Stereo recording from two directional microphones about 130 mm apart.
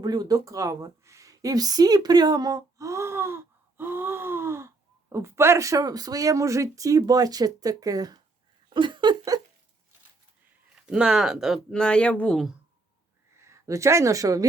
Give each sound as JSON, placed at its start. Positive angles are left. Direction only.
{"t": 0.0, "sound": "a woman's voice", "side_deg": -30}
{"t": 10.8, "sound": "speech", "side_deg": -5}
{"t": 13.3, "sound": "speech", "side_deg": -20}